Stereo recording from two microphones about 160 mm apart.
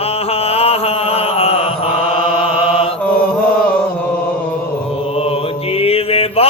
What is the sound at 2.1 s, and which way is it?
Chant, 35° left (ahead or behind).